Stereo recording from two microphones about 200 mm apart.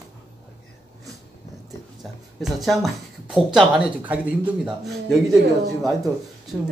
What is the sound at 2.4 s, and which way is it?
Speech, centre (ahead or behind).